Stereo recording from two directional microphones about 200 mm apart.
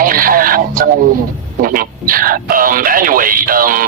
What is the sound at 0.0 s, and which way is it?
Music, 45° right (ahead or behind).